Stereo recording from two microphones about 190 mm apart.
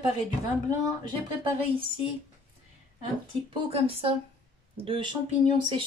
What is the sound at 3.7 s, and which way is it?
Speech, 30° right (ahead or behind).